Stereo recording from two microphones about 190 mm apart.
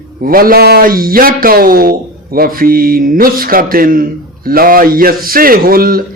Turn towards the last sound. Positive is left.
turn(degrees=-50)  # may be behind; listen again after turning